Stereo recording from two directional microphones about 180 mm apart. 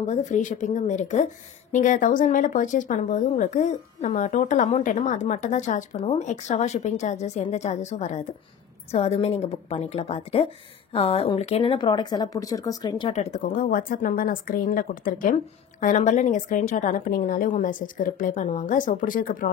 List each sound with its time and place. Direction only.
0.0 s speech: 40° left (ahead or behind); by 13.1 s 20° left (ahead or behind)
13.1 s a woman's voice: 40° left (ahead or behind)